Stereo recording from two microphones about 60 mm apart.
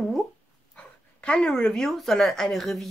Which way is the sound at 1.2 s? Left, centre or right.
Centre.